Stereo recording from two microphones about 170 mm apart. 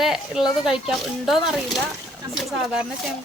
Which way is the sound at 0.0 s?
5° right (ahead or behind).